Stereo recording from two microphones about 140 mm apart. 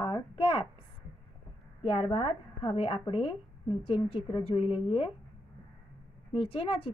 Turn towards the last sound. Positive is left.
turn(degrees=40)  # may be behind; listen again after turning